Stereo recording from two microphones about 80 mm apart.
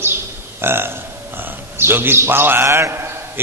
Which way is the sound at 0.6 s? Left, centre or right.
Right.